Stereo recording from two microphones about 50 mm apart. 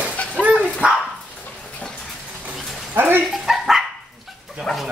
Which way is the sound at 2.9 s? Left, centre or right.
Right.